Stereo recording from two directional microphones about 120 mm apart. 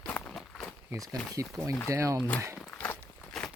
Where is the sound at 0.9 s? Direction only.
30° right (ahead or behind).